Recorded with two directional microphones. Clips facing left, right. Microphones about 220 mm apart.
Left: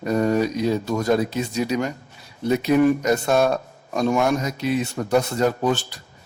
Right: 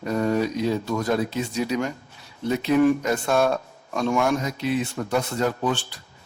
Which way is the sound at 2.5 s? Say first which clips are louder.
Left 2 dB; 15° left (ahead or behind).